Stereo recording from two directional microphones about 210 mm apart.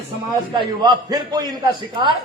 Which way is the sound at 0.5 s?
20° right (ahead or behind).